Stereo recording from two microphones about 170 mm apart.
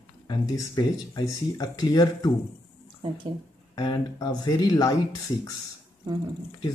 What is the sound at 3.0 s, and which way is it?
Speech, 30° right (ahead or behind).